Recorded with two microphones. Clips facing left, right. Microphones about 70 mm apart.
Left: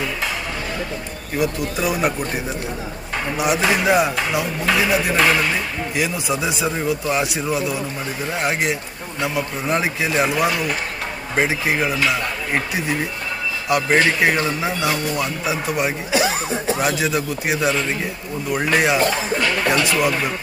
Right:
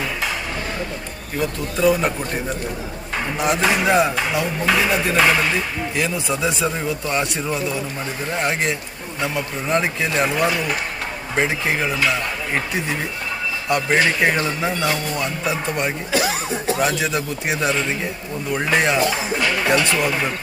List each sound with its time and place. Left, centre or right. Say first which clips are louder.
1.4 s speech: right 1 dB; centre
16.1 s speech: left 2 dB; left
16.8 s speech: even; centre